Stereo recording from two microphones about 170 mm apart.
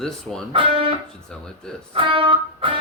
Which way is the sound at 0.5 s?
30° right (ahead or behind).